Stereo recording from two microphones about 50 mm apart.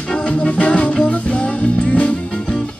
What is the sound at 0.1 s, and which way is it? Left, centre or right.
Music, left.